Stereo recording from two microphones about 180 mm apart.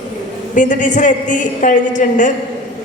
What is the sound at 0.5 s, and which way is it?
A woman's voice, 45° left (ahead or behind).